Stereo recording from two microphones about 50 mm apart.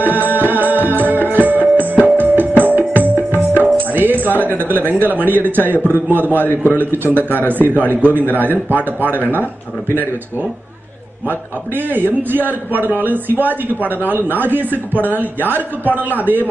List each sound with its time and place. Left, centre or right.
0.0 s music: right
5.0 s a man's voice: right
9.2 s speech: left
11.2 s a man's voice: right